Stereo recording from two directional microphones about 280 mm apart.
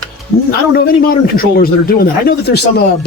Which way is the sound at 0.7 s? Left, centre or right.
Left.